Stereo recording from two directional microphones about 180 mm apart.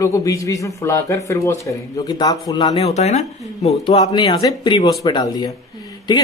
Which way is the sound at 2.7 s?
35° left (ahead or behind).